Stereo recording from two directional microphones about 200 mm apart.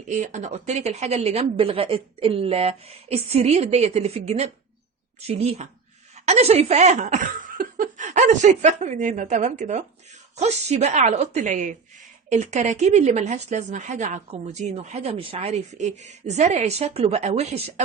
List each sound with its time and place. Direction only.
0.1 s a woman's voice: 35° right (ahead or behind)